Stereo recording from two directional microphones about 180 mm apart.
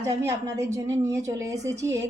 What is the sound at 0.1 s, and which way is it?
A woman's voice, 15° right (ahead or behind).